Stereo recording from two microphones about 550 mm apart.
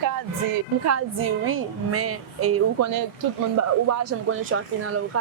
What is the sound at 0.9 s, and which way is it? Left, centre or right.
A woman's voice, right.